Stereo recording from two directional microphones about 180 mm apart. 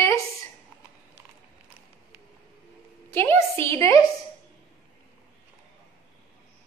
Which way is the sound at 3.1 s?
10° left (ahead or behind).